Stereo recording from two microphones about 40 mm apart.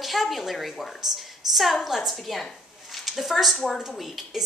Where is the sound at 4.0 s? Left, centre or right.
Centre.